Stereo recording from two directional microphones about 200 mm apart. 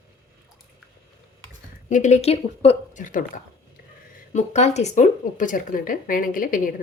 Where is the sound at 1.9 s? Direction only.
40° left (ahead or behind).